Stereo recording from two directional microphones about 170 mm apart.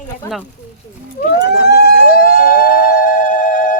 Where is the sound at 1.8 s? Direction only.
70° left (ahead or behind).